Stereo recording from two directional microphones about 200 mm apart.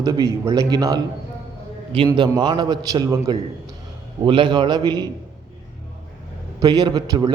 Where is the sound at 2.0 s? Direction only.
20° right (ahead or behind).